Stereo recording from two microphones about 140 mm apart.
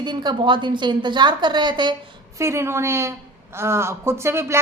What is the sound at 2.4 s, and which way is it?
Speech, 20° right (ahead or behind).